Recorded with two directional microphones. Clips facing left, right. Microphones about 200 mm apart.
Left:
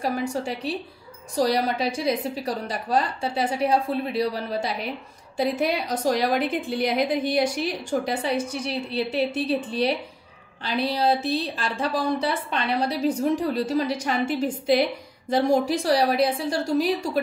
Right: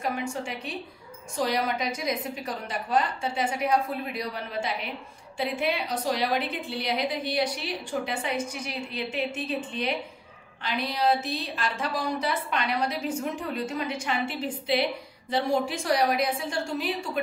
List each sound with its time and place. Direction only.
0.0 s a woman's voice: 35° left (ahead or behind)